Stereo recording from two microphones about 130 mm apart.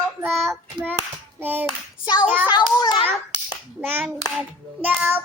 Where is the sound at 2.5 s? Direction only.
35° left (ahead or behind).